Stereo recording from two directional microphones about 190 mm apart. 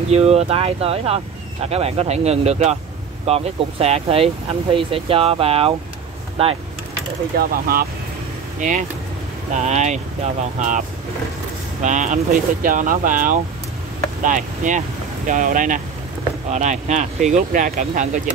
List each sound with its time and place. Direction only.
0.1 s speech: 35° right (ahead or behind)
7.3 s speech: 50° right (ahead or behind)
11.8 s speech: 40° right (ahead or behind)